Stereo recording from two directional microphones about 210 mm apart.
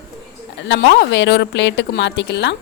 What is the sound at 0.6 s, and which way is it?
A woman's voice, 60° left (ahead or behind).